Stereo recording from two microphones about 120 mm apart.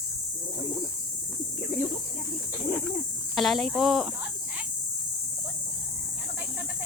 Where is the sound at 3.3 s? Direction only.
Centre (ahead or behind).